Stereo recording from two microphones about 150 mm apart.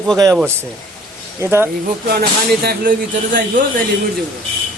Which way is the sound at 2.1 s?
90° right.